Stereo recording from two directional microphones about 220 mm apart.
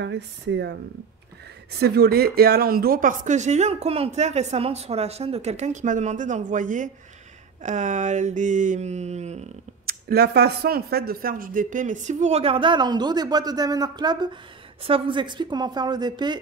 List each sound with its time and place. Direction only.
0.0 s speech: 50° right (ahead or behind); by 9.9 s 30° right (ahead or behind)
10.0 s speech: 45° right (ahead or behind); by 16.3 s 20° right (ahead or behind)